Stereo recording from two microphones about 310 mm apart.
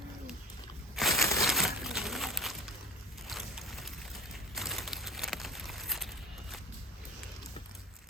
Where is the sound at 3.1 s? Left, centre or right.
Centre.